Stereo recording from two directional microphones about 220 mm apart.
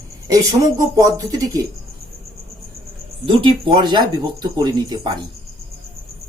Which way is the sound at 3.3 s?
20° right (ahead or behind).